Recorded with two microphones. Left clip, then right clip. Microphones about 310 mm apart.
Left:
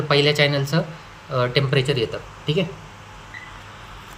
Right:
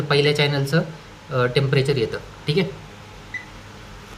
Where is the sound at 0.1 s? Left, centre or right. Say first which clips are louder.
Left 1 dB; centre.